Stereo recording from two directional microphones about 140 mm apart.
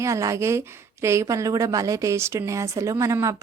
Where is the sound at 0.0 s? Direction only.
20° right (ahead or behind).